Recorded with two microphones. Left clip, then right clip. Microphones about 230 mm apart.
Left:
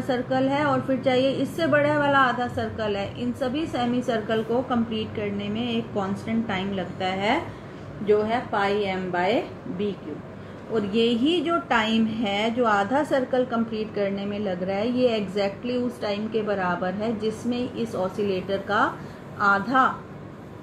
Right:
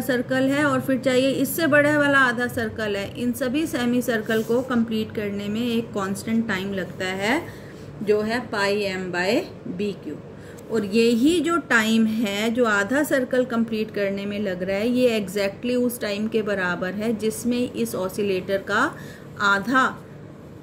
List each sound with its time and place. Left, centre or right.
0.1 s a woman's voice: right
8.5 s a woman's voice: right
11.4 s a woman's voice: right